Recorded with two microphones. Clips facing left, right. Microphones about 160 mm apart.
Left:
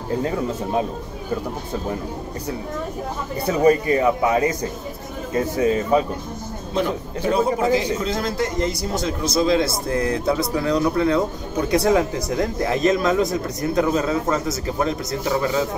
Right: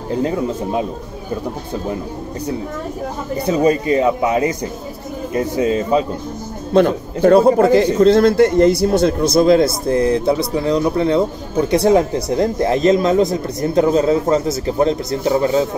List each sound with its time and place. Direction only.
3.4 s speech: 20° right (ahead or behind)
6.7 s a man's voice: 60° right (ahead or behind)
9.8 s speech: 30° right (ahead or behind)